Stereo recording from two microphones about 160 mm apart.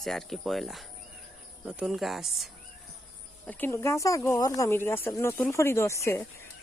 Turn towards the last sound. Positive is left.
turn(degrees=20)  # may be behind; listen again after turning